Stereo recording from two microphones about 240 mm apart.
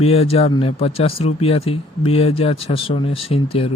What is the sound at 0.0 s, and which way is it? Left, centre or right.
Speech, left.